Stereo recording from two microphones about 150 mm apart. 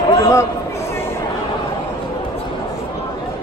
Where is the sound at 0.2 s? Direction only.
20° left (ahead or behind).